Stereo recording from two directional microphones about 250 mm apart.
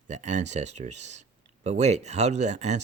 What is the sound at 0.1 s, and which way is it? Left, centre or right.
Speech, right.